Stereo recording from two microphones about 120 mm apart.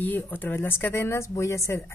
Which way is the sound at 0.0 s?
15° left (ahead or behind).